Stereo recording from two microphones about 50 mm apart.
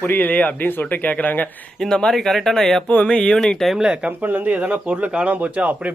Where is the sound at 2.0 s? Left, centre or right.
Centre.